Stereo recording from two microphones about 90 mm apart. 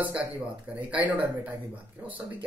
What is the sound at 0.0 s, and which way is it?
Speech, 20° right (ahead or behind).